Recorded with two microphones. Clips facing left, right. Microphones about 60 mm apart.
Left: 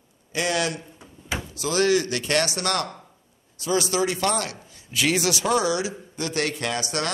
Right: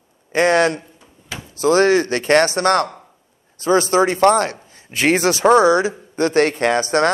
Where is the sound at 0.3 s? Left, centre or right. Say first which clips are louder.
Right 10 dB; right.